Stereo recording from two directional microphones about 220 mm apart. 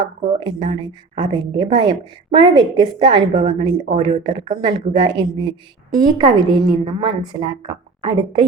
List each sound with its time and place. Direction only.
0.3 s speech: 20° right (ahead or behind)